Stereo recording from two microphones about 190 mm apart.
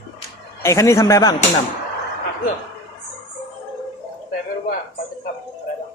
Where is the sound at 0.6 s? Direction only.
15° left (ahead or behind).